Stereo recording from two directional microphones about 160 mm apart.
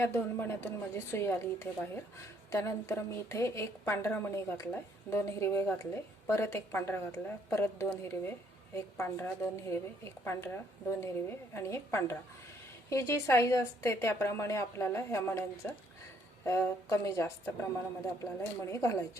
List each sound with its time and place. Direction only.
0.0 s a woman's voice: 15° left (ahead or behind)